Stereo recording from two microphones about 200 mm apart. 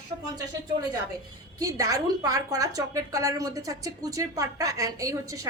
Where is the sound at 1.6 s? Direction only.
15° right (ahead or behind).